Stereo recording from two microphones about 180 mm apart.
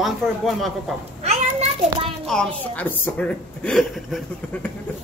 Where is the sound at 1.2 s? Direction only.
40° right (ahead or behind).